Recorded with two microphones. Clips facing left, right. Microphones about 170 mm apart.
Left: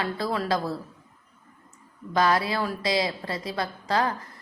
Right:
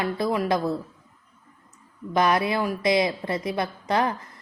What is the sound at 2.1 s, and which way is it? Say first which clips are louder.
A woman's voice: right 2 dB; 20° right (ahead or behind).